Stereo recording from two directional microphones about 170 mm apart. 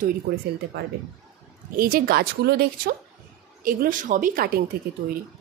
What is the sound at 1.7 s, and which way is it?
Speech, 60° right (ahead or behind).